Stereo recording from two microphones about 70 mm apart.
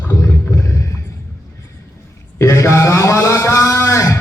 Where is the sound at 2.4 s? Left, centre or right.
Left.